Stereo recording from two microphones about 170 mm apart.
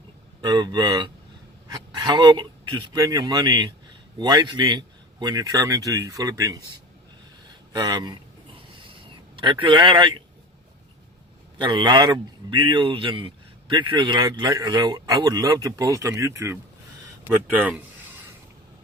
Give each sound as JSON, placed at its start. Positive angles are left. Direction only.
{"t": 0.4, "sound": "speech", "side_deg": -25}
{"t": 7.7, "sound": "speech", "side_deg": -25}
{"t": 8.8, "sound": "a sound", "side_deg": -30}
{"t": 11.5, "sound": "speech", "side_deg": -25}